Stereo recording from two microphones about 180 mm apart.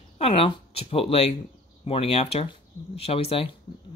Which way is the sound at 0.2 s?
30° left (ahead or behind).